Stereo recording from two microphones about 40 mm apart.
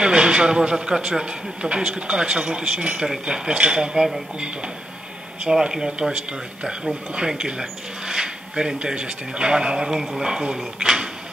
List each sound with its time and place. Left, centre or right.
0.0 s speech: right
10.8 s speech: right